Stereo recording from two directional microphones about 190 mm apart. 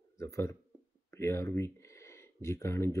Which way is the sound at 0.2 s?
15° left (ahead or behind).